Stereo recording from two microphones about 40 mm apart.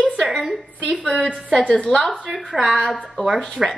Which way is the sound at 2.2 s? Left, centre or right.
Right.